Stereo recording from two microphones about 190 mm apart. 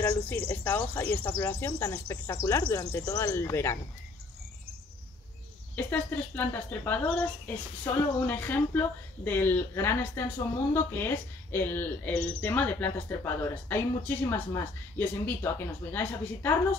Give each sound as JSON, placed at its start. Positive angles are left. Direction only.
{"t": 0.0, "sound": "speech", "side_deg": 10}
{"t": 5.9, "sound": "speech", "side_deg": 10}